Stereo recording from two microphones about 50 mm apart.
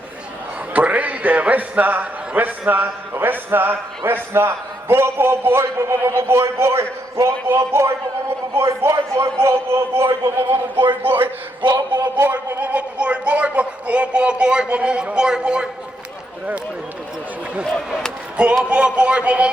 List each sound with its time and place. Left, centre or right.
0.7 s a man's voice: right
5.5 s a man's voice: right
7.3 s a man's voice: right
8.6 s a man's voice: right
12.3 s speech: right; by 15.7 s centre
18.4 s speech: right